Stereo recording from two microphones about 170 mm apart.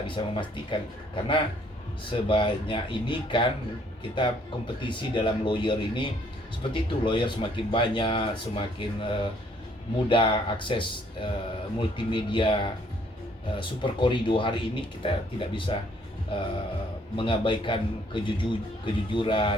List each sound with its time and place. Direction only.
0.1 s speech: 30° left (ahead or behind)
17.2 s speech: 30° left (ahead or behind)